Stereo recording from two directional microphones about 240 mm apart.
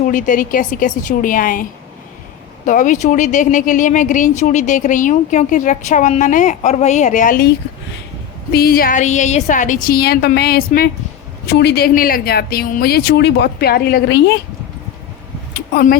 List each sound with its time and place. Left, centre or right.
0.0 s speech: left
2.6 s speech: left
8.5 s speech: left
15.5 s a sound: left